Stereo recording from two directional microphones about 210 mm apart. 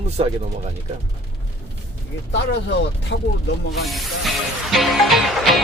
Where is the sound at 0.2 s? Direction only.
25° right (ahead or behind).